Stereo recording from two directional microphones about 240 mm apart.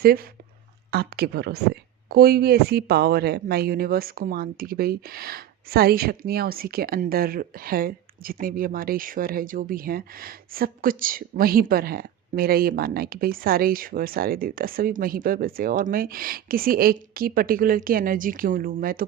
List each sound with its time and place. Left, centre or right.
0.0 s speech: right